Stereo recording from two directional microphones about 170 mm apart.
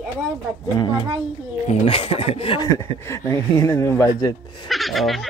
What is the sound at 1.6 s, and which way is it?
Speech, 35° left (ahead or behind).